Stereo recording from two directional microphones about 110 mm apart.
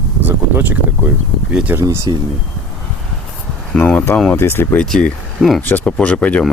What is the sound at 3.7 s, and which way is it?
Speech, 10° left (ahead or behind).